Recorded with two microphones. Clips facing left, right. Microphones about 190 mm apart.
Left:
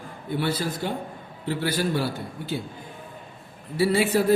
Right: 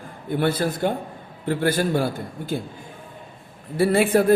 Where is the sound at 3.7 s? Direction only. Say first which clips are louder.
Right 3 dB; 50° right (ahead or behind).